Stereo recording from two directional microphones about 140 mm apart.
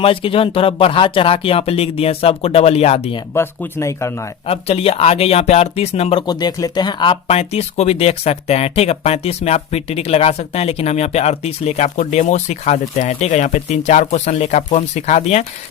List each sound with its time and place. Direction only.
0.0 s speech: 40° left (ahead or behind)
3.3 s speech: 15° left (ahead or behind)
4.4 s speech: 45° left (ahead or behind)
6.2 s speech: 30° left (ahead or behind)
7.3 s speech: 50° left (ahead or behind)